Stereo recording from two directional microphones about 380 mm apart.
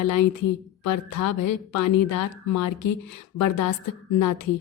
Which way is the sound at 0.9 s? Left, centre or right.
Left.